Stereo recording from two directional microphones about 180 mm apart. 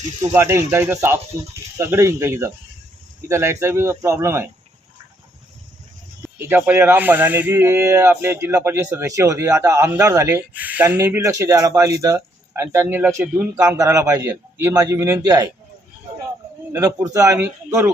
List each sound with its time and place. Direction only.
0.3 s speech: 15° right (ahead or behind)
6.2 s speech: 10° right (ahead or behind)
16.7 s speech: 20° right (ahead or behind)